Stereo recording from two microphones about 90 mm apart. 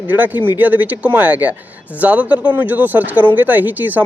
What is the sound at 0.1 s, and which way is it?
Speech, 20° right (ahead or behind).